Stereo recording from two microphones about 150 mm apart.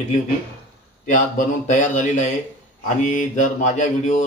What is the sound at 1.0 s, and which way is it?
Speech, 60° left (ahead or behind).